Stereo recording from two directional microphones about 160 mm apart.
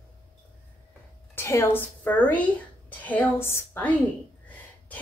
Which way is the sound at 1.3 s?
15° left (ahead or behind).